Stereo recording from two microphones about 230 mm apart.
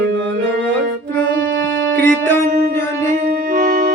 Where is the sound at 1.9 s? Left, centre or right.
Centre.